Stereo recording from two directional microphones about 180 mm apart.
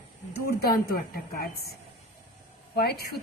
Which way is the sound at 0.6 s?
55° left (ahead or behind).